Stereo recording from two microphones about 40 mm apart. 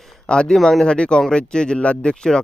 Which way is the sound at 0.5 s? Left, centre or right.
Centre.